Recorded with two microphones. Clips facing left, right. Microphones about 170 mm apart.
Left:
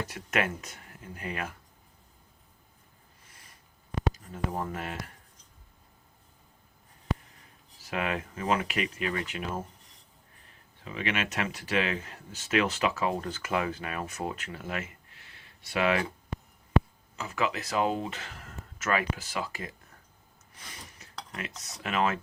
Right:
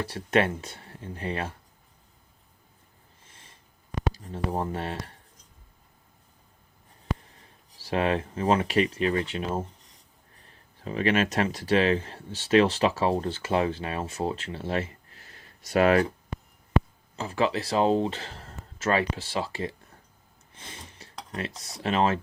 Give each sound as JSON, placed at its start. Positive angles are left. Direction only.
{"t": 0.0, "sound": "speech", "side_deg": -30}
{"t": 3.2, "sound": "a sound", "side_deg": -25}
{"t": 4.1, "sound": "speech", "side_deg": -35}
{"t": 7.3, "sound": "speech", "side_deg": -30}
{"t": 17.2, "sound": "speech", "side_deg": -30}
{"t": 20.5, "sound": "a sound", "side_deg": -25}
{"t": 21.3, "sound": "speech", "side_deg": -30}